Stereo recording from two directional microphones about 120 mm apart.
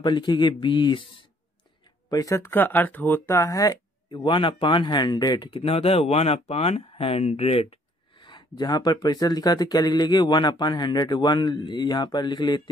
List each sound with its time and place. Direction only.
0.0 s speech: 40° left (ahead or behind)
2.0 s speech: 30° left (ahead or behind)
4.2 s speech: 40° left (ahead or behind)
5.6 s speech: 55° left (ahead or behind)
8.2 s speech: 40° left (ahead or behind)